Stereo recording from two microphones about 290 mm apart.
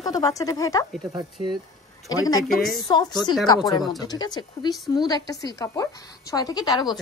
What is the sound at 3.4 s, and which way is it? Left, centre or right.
A woman's voice, centre.